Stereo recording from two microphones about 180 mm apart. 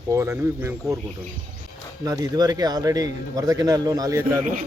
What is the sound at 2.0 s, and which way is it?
A man's voice, 20° right (ahead or behind).